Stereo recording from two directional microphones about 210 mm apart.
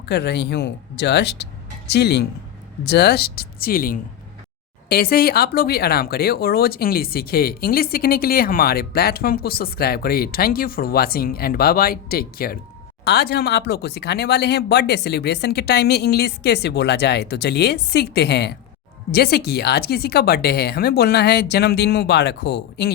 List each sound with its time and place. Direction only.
0.0 s speech: 50° left (ahead or behind)